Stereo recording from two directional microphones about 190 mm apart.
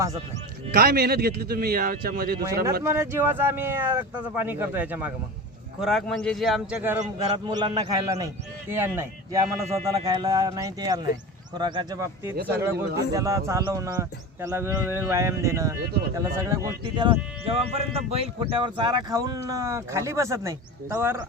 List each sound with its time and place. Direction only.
0.7 s speech: 55° right (ahead or behind)
2.8 s a man's voice: 10° right (ahead or behind)
7.3 s speech: 20° right (ahead or behind)
17.0 s speech: 30° right (ahead or behind); by 21.2 s 10° right (ahead or behind)